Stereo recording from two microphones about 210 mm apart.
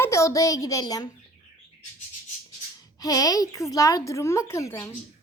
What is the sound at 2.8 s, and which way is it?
A woman's voice, 15° left (ahead or behind).